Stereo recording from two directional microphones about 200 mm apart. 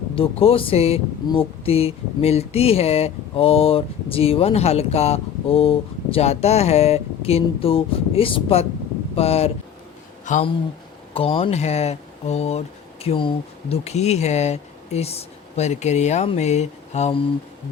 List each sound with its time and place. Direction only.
0.2 s speech: 30° left (ahead or behind)
11.1 s speech: 30° left (ahead or behind)